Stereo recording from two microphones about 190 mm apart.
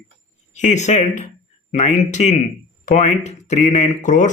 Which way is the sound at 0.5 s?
40° left (ahead or behind).